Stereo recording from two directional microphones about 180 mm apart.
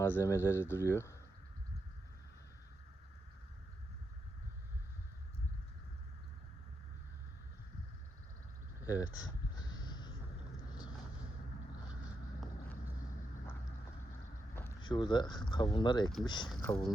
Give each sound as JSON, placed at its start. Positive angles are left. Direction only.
{"t": 0.0, "sound": "speech", "side_deg": 15}
{"t": 8.8, "sound": "a sound", "side_deg": 15}
{"t": 14.8, "sound": "speech", "side_deg": 25}